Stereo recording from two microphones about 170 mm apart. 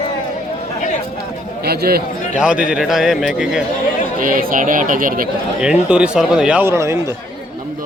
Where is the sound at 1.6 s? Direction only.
70° right (ahead or behind).